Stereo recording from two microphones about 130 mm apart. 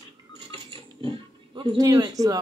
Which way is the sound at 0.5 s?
45° right (ahead or behind).